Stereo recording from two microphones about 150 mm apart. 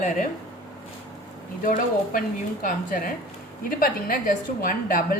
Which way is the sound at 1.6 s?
65° left (ahead or behind).